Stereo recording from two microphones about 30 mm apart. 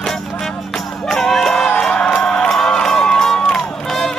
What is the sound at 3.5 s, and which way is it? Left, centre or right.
Run, centre.